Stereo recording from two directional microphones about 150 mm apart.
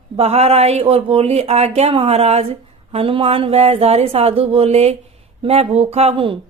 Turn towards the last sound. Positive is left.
turn(degrees=-35)  # may be behind; listen again after turning